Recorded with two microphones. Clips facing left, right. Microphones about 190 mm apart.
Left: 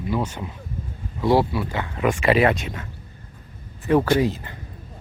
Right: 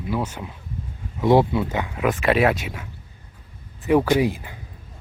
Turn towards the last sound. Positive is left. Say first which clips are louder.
# even
turn(degrees=-10)  # may be behind; listen again after turning